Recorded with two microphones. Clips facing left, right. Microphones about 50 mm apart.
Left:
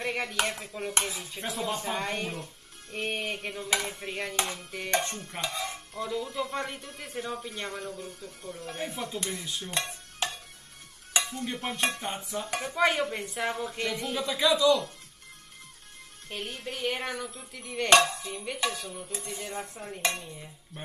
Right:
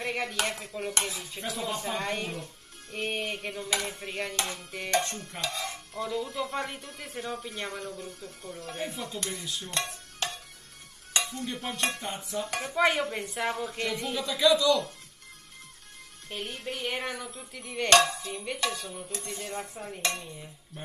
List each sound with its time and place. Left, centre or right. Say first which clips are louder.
0.0 s a sound: even; centre
0.6 s speech: even; centre
4.9 s speech: right 1 dB; centre
5.7 s speech: even; centre
8.7 s speech: left 1 dB; centre
10.2 s music: left 1 dB; centre
11.1 s dishes: left 1 dB; centre
11.9 s music: left 1 dB; centre
12.2 s speech: even; centre
14.1 s speech: right 2 dB; centre
16.3 s speech: right 1 dB; centre